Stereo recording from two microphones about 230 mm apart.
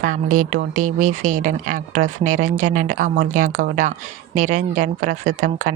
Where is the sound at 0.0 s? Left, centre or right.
Right.